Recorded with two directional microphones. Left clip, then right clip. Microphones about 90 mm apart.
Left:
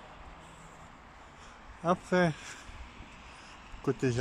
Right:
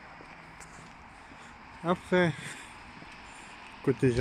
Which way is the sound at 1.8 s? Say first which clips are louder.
Right 1 dB; 20° left (ahead or behind).